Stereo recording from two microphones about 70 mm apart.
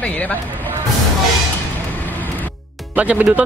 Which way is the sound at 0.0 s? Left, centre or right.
Left.